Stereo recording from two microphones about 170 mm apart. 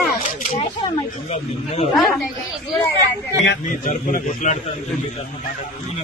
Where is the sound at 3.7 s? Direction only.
50° left (ahead or behind).